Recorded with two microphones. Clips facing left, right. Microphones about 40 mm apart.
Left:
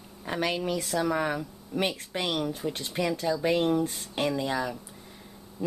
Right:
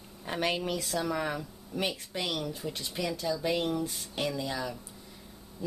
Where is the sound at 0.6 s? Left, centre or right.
Left.